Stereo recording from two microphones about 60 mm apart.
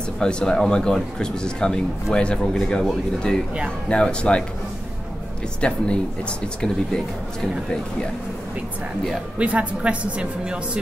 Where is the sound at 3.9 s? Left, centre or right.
Centre.